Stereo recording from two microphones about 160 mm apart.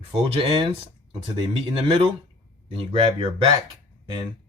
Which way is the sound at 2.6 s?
40° right (ahead or behind).